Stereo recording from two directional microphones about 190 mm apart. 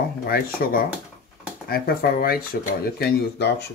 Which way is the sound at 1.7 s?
55° left (ahead or behind).